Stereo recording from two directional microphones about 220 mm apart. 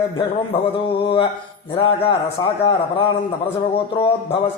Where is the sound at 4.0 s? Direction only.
25° left (ahead or behind).